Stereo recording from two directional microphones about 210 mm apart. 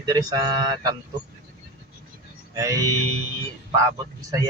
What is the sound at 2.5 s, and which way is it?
Speech, 15° right (ahead or behind).